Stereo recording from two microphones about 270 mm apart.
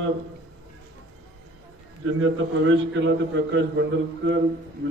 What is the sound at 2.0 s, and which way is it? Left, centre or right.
A man's voice, right.